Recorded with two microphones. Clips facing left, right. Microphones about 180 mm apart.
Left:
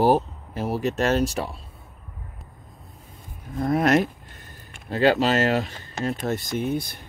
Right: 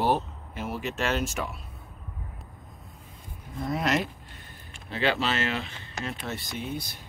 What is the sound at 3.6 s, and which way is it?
Speech, 50° left (ahead or behind).